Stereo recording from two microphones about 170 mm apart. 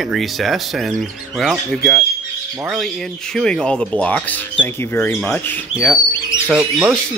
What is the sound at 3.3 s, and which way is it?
Speech, 5° left (ahead or behind).